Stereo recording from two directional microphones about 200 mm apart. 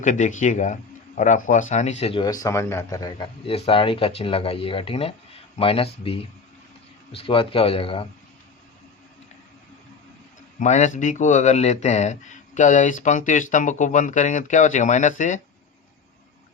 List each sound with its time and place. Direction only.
0.0 s speech: 40° left (ahead or behind)
10.6 s speech: 35° left (ahead or behind)